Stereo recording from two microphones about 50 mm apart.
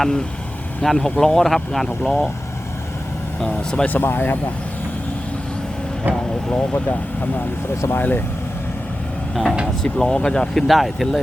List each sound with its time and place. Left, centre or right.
0.0 s speech: centre
3.4 s speech: centre
3.8 s speech: left
6.5 s speech: left
9.3 s speech: centre
10.0 s speech: centre
10.7 s speech: centre